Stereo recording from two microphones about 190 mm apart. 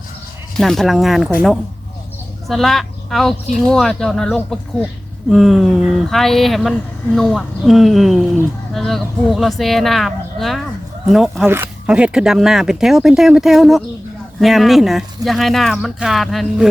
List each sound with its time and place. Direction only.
0.5 s speech: centre (ahead or behind)
2.5 s speech: centre (ahead or behind)
11.4 s speech: 10° right (ahead or behind)